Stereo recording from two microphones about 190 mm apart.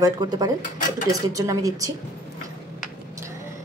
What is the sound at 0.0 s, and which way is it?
Speech, 20° right (ahead or behind).